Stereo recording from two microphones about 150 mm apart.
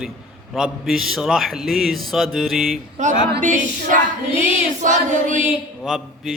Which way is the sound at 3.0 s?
55° right (ahead or behind).